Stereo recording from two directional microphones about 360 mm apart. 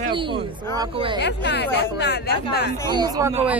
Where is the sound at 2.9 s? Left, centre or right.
Centre.